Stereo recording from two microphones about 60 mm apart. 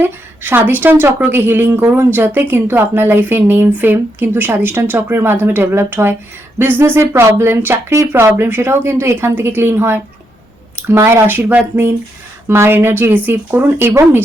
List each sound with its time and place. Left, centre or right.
0.0 s speech: right
11.3 s speech: right
12.5 s speech: right